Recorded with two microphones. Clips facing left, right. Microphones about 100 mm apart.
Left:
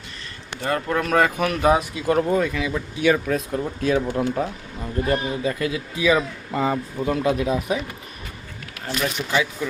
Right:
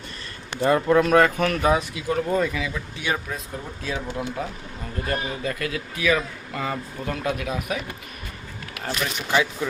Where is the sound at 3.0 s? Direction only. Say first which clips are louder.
Left 9 dB; 75° left (ahead or behind).